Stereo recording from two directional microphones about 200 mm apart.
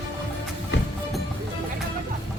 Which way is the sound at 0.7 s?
65° left (ahead or behind).